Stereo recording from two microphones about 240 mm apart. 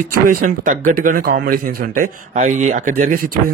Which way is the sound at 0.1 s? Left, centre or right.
Right.